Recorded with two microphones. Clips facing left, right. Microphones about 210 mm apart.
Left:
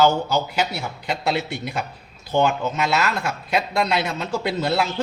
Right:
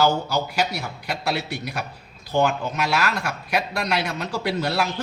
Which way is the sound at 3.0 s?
25° left (ahead or behind).